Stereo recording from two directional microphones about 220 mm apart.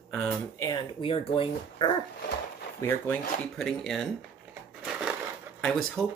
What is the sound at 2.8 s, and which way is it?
Speech, 10° left (ahead or behind).